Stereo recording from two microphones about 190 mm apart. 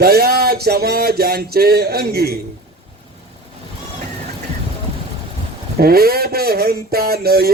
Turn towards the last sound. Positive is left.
turn(degrees=-55)  # may be behind; listen again after turning